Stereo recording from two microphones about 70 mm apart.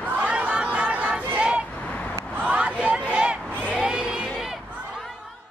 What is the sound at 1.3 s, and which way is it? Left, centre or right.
Vehicle, centre.